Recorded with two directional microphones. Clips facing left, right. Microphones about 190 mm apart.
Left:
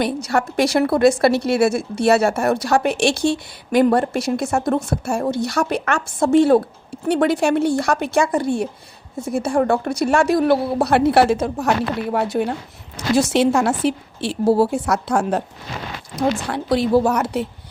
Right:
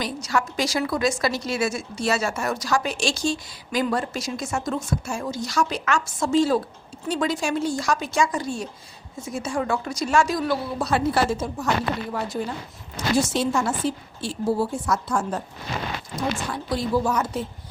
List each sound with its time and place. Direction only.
0.0 s a woman's voice: 60° left (ahead or behind)
16.5 s a woman's voice: 70° left (ahead or behind)